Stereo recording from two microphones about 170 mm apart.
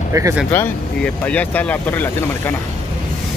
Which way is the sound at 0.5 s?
10° left (ahead or behind).